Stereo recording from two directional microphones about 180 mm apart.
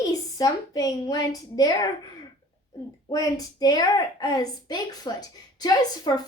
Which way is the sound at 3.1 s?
20° left (ahead or behind).